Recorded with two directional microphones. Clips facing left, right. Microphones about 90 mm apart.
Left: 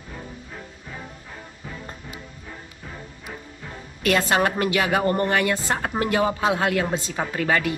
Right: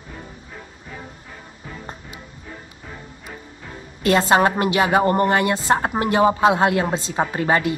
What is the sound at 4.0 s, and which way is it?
A man's voice, 25° right (ahead or behind).